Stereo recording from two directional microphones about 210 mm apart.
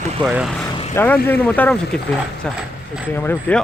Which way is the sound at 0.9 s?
10° left (ahead or behind).